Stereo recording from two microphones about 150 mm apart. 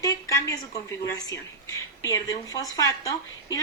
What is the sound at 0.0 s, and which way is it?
A woman's voice, 20° left (ahead or behind).